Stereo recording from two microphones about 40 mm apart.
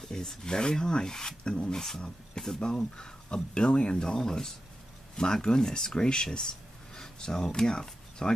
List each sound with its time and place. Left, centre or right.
0.1 s speech: centre